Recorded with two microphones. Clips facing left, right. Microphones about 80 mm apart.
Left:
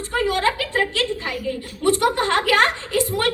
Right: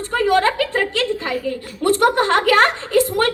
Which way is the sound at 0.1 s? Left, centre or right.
Right.